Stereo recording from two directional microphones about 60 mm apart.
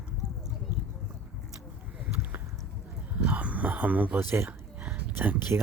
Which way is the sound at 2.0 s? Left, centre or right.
Right.